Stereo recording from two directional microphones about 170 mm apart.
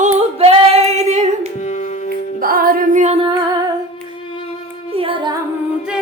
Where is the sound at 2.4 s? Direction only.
55° right (ahead or behind).